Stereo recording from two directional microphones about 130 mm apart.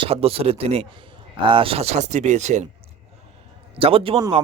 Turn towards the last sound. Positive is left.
turn(degrees=-45)  # may be behind; listen again after turning